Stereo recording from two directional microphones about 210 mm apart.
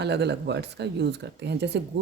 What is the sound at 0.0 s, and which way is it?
Speech, 55° right (ahead or behind).